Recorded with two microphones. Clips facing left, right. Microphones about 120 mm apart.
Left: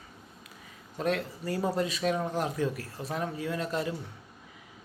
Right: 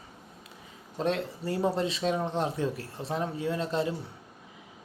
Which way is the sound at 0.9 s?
25° right (ahead or behind).